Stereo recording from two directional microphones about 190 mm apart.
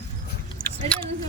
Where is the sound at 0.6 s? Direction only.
40° left (ahead or behind).